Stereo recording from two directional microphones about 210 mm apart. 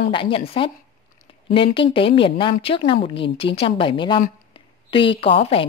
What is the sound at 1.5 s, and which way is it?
A woman's voice, 25° left (ahead or behind).